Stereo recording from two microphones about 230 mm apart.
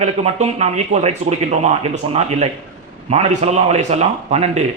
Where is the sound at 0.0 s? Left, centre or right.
Right.